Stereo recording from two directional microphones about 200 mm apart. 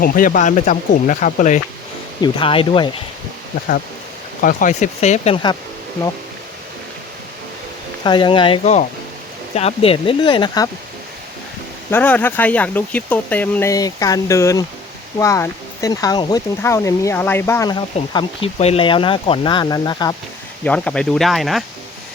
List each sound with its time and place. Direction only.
0.0 s speech: 45° left (ahead or behind)
2.2 s speech: 25° left (ahead or behind)
4.4 s speech: 40° left (ahead or behind); by 5.5 s 25° left (ahead or behind)
8.0 s speech: 25° left (ahead or behind)
11.9 s speech: 10° left (ahead or behind)
20.7 s speech: 5° left (ahead or behind)